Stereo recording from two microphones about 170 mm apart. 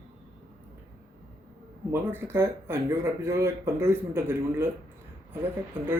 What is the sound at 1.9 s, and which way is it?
Speech, 10° right (ahead or behind).